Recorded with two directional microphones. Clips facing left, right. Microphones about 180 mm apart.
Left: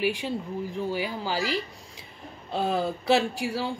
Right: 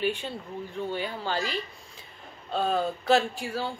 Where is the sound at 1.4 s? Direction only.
90° left.